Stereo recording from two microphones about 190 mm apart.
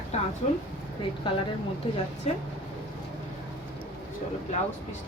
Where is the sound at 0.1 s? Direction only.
35° left (ahead or behind).